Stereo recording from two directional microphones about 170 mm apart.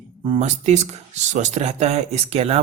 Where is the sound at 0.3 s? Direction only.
40° right (ahead or behind).